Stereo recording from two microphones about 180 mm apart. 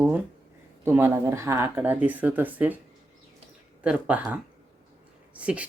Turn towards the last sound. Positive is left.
turn(degrees=-5)  # may be behind; listen again after turning